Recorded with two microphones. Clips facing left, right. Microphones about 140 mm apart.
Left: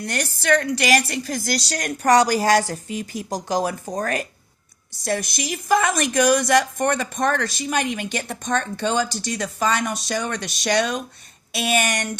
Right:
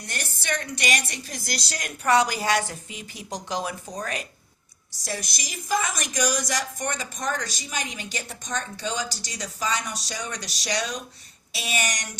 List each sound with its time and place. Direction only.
0.0 s a woman's voice: 80° left
1.3 s a woman's voice: 45° left (ahead or behind)